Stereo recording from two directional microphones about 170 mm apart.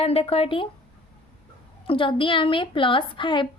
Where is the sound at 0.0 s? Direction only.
35° left (ahead or behind).